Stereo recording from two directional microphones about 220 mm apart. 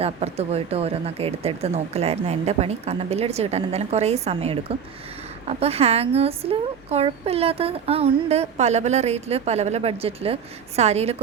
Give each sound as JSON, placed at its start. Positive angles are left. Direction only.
{"t": 0.0, "sound": "speech", "side_deg": -30}